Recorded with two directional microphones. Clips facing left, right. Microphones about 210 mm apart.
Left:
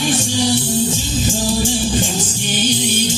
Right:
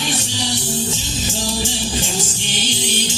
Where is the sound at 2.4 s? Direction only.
50° left (ahead or behind).